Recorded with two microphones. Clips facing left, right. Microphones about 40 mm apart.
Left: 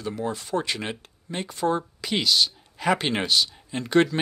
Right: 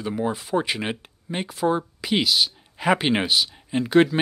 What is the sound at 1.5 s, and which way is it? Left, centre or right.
Speech, centre.